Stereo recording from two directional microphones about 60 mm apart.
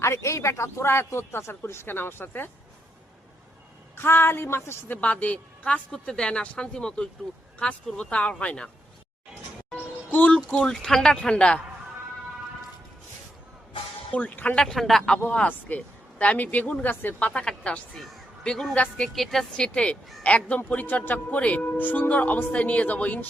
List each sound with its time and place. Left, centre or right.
0.0 s speech: left
3.9 s a woman's voice: left
4.9 s speech: left
10.1 s speech: left
10.5 s speech: centre
14.1 s speech: left
14.5 s speech: centre
15.2 s speech: left
16.9 s a woman's voice: left
17.3 s a woman's voice: centre
19.5 s speech: centre